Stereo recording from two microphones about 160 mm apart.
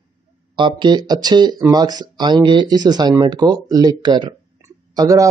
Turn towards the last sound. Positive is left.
turn(degrees=-20)  # may be behind; listen again after turning